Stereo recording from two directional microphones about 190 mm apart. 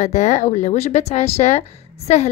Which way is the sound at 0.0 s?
40° left (ahead or behind).